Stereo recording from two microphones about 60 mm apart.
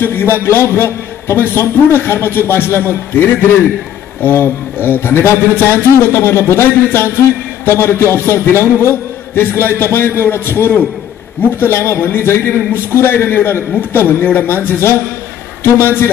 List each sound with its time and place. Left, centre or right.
0.0 s a man's voice: left